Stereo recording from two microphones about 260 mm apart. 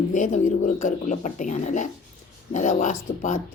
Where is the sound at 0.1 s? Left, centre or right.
Left.